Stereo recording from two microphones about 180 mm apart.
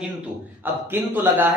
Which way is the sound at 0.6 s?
10° right (ahead or behind).